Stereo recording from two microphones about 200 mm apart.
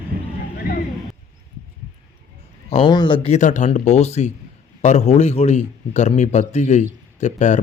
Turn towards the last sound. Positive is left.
turn(degrees=35)  # may be behind; listen again after turning